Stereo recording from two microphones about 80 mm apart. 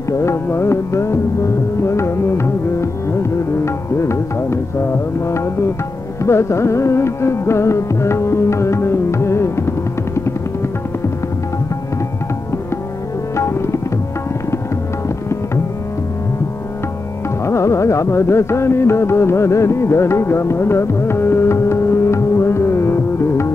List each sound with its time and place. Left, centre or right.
0.1 s music: left
13.4 s tabla: left
17.5 s carnatic music: left